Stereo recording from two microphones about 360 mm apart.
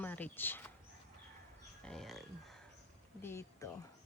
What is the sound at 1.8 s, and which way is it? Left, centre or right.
Speech, centre.